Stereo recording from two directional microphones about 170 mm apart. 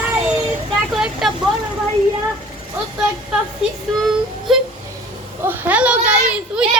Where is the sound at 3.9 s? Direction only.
Centre (ahead or behind).